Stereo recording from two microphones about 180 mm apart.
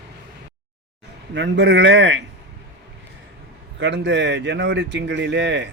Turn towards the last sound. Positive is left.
turn(degrees=-75)  # may be behind; listen again after turning